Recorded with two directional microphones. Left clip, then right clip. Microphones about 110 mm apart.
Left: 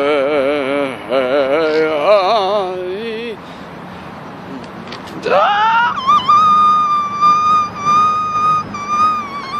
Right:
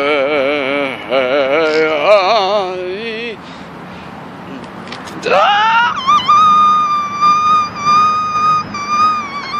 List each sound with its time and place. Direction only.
0.0 s music: 25° left (ahead or behind)
5.2 s wail: 30° left (ahead or behind)